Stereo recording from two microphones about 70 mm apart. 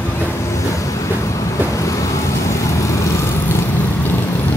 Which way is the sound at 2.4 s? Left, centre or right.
Left.